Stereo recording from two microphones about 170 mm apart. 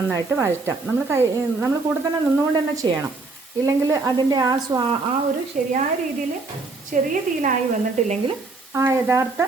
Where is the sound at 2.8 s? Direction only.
25° right (ahead or behind).